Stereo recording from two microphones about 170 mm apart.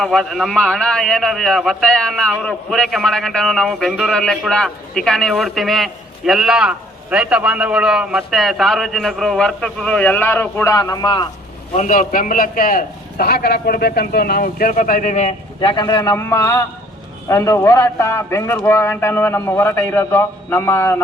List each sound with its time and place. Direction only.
0.0 s a man's voice: 5° left (ahead or behind); by 11.3 s 25° left (ahead or behind)
11.7 s a man's voice: 45° left (ahead or behind)
15.6 s a man's voice: 25° left (ahead or behind)